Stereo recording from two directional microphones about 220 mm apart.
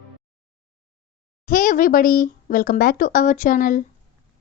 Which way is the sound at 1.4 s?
40° left (ahead or behind).